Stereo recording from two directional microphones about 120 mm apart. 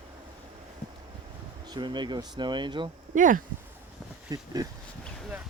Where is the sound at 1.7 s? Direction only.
40° right (ahead or behind).